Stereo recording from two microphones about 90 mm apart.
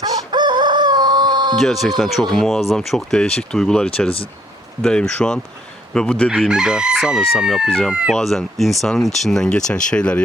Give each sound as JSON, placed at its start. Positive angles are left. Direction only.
{"t": 0.0, "sound": "chicken", "side_deg": -55}
{"t": 1.5, "sound": "speech", "side_deg": 0}
{"t": 6.3, "sound": "chicken", "side_deg": -5}
{"t": 8.1, "sound": "speech", "side_deg": 0}